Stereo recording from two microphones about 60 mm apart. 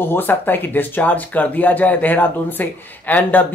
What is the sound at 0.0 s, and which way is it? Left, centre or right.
Speech, left.